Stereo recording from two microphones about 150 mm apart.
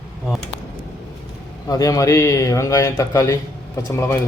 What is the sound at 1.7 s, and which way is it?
A man's voice, 25° left (ahead or behind).